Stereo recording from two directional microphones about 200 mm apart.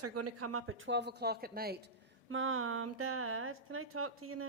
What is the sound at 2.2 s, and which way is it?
A woman's voice, 90° right.